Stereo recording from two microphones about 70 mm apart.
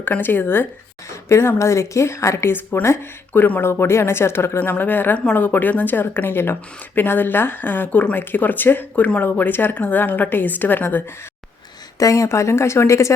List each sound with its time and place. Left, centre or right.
0.0 s a woman's voice: left
11.9 s speech: left